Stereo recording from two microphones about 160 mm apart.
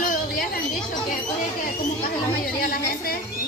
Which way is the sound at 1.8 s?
60° left (ahead or behind).